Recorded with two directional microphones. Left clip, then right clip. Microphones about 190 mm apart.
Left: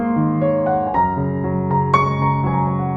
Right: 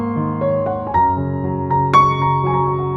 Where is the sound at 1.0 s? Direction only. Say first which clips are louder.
Right 2 dB; centre (ahead or behind).